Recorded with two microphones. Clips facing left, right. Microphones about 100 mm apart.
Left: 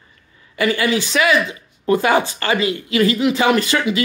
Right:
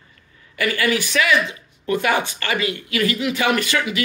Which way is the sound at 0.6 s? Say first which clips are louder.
Left 3 dB; 25° left (ahead or behind).